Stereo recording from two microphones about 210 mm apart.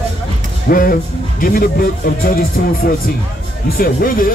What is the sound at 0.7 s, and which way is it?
Speech, 40° left (ahead or behind).